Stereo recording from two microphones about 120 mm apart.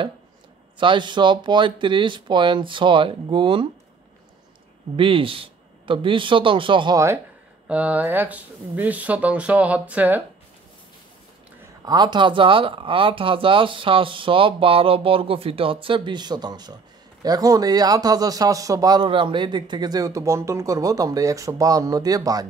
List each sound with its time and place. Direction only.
0.7 s speech: 40° right (ahead or behind)
4.9 s speech: 45° right (ahead or behind)
7.6 s speech: 10° right (ahead or behind)
11.8 s a man's voice: 35° right (ahead or behind)
19.0 s speech: 45° right (ahead or behind)